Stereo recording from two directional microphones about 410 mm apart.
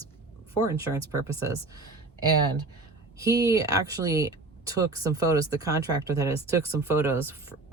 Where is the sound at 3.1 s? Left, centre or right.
Centre.